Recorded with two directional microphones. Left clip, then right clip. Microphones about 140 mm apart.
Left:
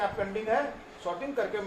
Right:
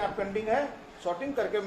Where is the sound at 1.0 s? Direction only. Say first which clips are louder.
Right 1 dB; 60° right (ahead or behind).